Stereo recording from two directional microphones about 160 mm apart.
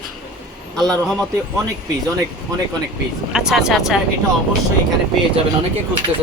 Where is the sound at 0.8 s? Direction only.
5° left (ahead or behind).